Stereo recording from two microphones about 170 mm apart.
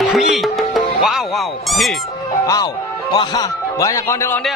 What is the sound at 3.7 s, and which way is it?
Speech, 20° left (ahead or behind).